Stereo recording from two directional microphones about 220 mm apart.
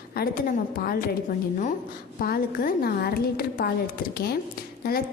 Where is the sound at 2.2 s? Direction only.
40° left (ahead or behind).